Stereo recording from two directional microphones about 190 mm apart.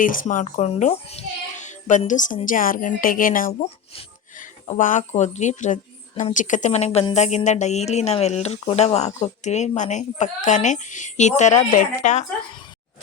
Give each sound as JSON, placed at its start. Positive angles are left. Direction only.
{"t": 0.0, "sound": "a woman's voice", "side_deg": 45}